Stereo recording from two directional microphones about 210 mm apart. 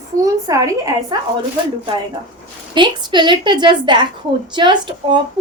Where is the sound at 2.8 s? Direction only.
20° right (ahead or behind).